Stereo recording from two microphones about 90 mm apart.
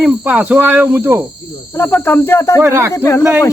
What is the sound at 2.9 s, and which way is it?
Speech, 25° left (ahead or behind).